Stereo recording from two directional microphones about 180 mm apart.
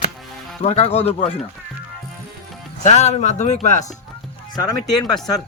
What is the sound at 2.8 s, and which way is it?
Speech, 40° left (ahead or behind).